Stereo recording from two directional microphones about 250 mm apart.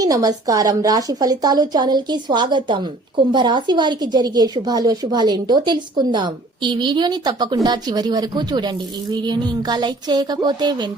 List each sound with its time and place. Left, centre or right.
0.0 s a woman's voice: centre